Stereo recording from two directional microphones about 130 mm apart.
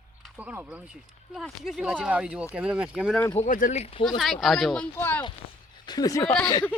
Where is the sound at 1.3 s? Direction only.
Centre (ahead or behind).